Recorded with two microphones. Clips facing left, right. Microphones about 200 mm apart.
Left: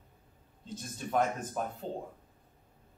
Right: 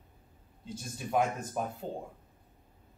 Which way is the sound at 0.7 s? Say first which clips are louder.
Right 1 dB; 10° right (ahead or behind).